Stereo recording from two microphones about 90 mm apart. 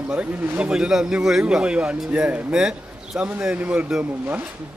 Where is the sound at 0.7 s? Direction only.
10° right (ahead or behind).